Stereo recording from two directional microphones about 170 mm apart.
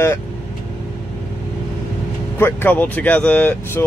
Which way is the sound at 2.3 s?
10° left (ahead or behind).